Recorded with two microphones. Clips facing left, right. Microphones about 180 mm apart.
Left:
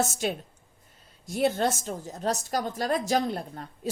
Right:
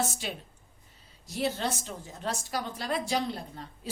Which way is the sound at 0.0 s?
45° left (ahead or behind).